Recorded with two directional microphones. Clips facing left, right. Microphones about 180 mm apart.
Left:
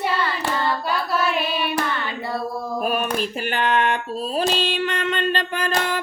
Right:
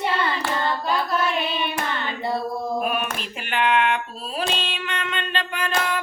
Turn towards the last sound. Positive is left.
turn(degrees=40)  # may be behind; listen again after turning